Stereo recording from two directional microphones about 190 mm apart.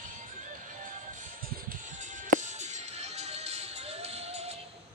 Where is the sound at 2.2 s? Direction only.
40° right (ahead or behind).